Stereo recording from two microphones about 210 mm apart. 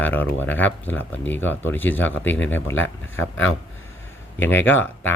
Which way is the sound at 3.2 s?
65° left (ahead or behind).